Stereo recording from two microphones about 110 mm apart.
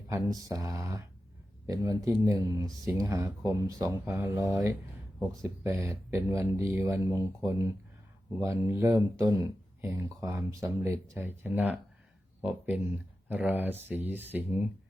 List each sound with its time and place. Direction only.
0.1 s speech: 35° right (ahead or behind); by 14.7 s 15° right (ahead or behind)